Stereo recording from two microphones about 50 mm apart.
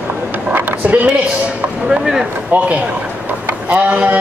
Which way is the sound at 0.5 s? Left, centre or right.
Right.